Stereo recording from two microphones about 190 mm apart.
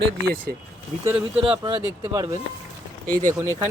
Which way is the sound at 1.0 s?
5° right (ahead or behind).